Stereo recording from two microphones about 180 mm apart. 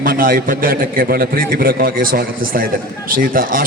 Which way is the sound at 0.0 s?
50° right (ahead or behind).